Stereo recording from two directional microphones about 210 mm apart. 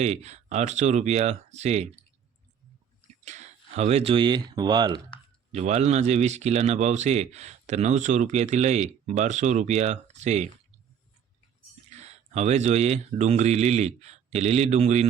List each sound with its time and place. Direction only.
0.0 s speech: 30° right (ahead or behind)
3.2 s speech: 35° right (ahead or behind)
5.5 s speech: 30° right (ahead or behind)
11.9 s speech: 30° right (ahead or behind)